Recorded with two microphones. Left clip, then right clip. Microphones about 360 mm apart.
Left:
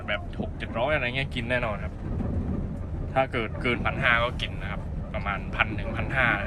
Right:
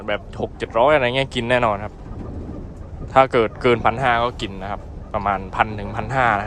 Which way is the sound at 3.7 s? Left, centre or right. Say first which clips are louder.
Right 2 dB; centre.